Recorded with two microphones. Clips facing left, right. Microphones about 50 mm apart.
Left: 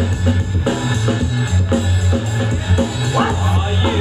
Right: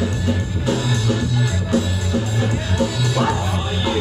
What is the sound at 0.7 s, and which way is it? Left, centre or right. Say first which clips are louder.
Music: left 1 dB; centre.